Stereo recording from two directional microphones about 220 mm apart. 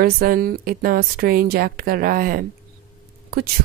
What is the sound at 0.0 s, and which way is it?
A woman's voice, 40° right (ahead or behind).